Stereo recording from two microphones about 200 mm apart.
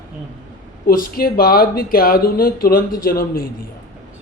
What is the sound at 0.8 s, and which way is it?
Speech, 45° left (ahead or behind).